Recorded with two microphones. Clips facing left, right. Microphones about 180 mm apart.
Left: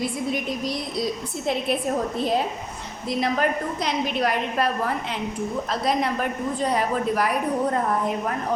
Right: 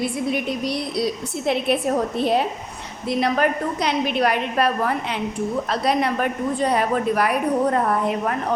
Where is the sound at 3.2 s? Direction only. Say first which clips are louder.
Right 3 dB; 65° right (ahead or behind).